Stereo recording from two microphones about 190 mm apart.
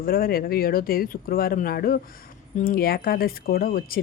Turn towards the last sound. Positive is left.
turn(degrees=50)  # may be behind; listen again after turning